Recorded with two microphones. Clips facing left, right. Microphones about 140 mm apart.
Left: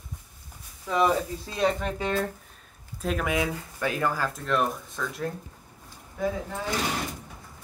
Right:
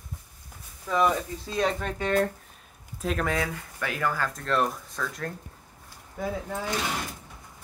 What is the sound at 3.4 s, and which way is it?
Speech, 20° left (ahead or behind).